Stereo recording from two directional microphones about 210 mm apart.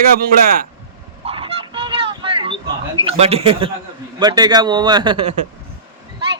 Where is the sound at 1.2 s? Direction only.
25° right (ahead or behind).